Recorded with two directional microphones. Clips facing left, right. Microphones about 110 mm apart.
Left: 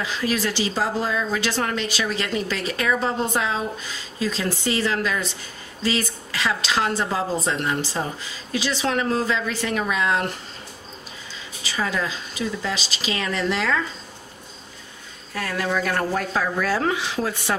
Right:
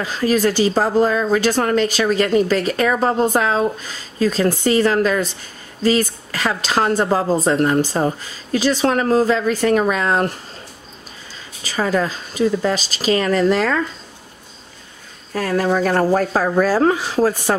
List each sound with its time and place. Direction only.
0.0 s speech: 45° right (ahead or behind)
11.6 s speech: 45° right (ahead or behind)
15.3 s speech: 40° right (ahead or behind)